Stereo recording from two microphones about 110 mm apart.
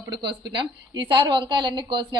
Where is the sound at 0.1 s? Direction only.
45° right (ahead or behind).